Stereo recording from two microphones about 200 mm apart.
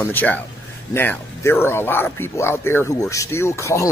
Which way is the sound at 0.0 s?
10° left (ahead or behind).